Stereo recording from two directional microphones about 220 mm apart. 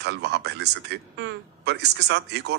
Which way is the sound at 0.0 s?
50° right (ahead or behind).